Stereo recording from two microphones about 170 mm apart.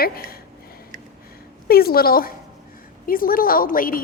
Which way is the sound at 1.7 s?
60° left (ahead or behind).